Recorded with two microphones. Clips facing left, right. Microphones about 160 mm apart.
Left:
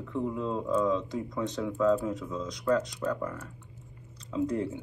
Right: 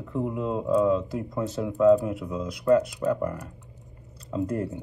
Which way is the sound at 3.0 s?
20° right (ahead or behind).